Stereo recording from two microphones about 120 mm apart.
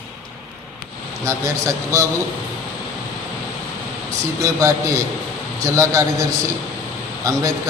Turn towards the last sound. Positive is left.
turn(degrees=-30)  # may be behind; listen again after turning